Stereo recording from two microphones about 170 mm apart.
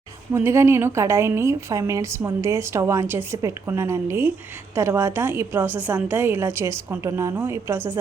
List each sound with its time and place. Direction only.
0.3 s a woman's voice: 15° right (ahead or behind)